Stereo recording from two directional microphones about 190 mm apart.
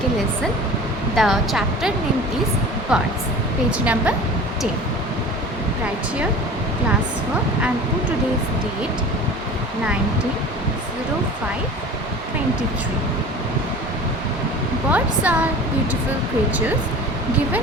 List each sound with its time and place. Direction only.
1.1 s speech: centre (ahead or behind)
2.9 s speech: 5° right (ahead or behind)
14.8 s speech: 10° right (ahead or behind)